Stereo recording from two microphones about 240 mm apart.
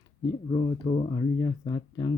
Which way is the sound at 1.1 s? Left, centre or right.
Centre.